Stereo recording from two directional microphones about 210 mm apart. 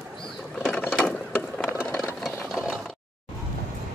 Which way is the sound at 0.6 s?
5° left (ahead or behind).